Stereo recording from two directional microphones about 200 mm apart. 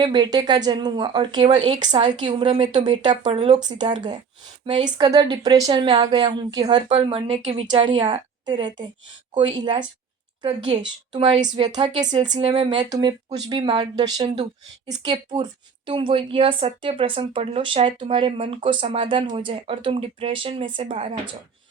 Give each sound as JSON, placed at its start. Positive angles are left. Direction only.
{"t": 0.0, "sound": "speech", "side_deg": -20}